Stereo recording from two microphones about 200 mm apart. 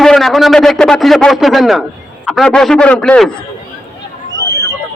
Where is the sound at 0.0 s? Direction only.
Centre (ahead or behind).